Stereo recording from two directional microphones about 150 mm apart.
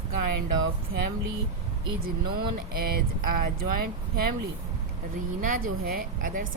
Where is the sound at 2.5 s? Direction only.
85° right.